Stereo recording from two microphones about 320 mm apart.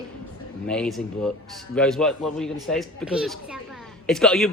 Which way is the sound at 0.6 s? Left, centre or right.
Centre.